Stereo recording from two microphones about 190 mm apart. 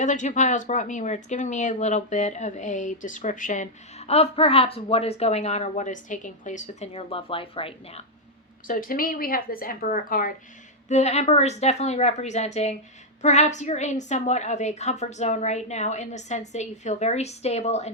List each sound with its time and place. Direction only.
0.0 s speech: 40° left (ahead or behind)
8.6 s speech: 45° left (ahead or behind)
10.8 s speech: 35° left (ahead or behind)